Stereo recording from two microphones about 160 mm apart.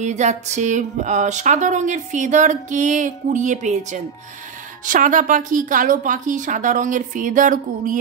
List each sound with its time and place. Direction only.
0.0 s a woman's voice: 45° right (ahead or behind)